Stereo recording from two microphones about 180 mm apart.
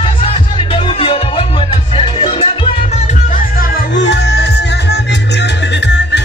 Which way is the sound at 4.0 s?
75° left (ahead or behind).